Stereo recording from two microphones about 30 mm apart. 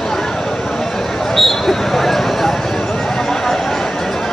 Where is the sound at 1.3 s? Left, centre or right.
Centre.